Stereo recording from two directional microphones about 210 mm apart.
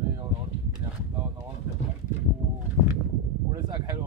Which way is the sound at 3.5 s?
15° right (ahead or behind).